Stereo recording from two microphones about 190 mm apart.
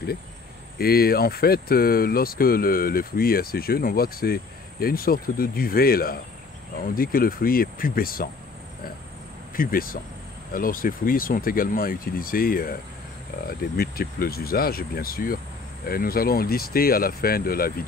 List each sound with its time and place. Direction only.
0.7 s speech: 55° left (ahead or behind)
9.6 s speech: 50° left (ahead or behind)